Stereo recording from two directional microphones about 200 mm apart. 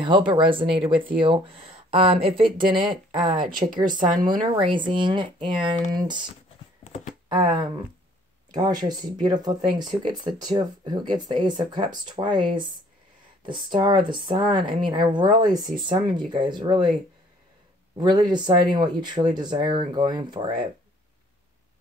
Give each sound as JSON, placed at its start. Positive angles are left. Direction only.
{"t": 0.0, "sound": "speech", "side_deg": -25}
{"t": 3.3, "sound": "speech", "side_deg": -45}
{"t": 4.6, "sound": "speech", "side_deg": -25}
{"t": 17.9, "sound": "speech", "side_deg": -20}